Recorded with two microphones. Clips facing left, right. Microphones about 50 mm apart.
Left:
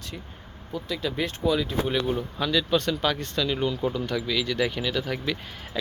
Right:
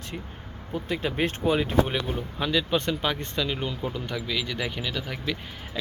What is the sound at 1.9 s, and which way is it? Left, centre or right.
Speech, right.